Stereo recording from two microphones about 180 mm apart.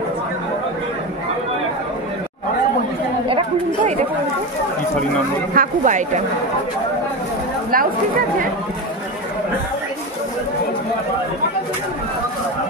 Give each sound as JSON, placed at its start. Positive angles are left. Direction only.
{"t": 5.5, "sound": "speech", "side_deg": -45}
{"t": 7.7, "sound": "speech", "side_deg": -50}